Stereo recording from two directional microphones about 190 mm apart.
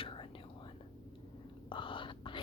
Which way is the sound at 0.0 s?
25° left (ahead or behind).